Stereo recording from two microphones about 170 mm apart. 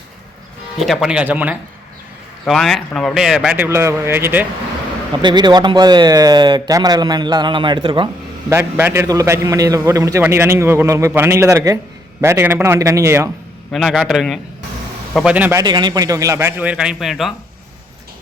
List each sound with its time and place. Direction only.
0.8 s speech: centre (ahead or behind)
2.4 s speech: centre (ahead or behind)
5.2 s speech: 25° right (ahead or behind)
8.4 s a man's voice: 15° right (ahead or behind)
13.7 s a man's voice: centre (ahead or behind)
15.6 s a man's voice: 25° right (ahead or behind); by 17.3 s centre (ahead or behind)